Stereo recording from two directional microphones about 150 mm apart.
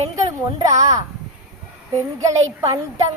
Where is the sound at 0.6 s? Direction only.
20° right (ahead or behind).